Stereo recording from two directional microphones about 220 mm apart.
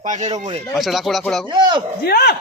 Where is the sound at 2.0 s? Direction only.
45° left (ahead or behind).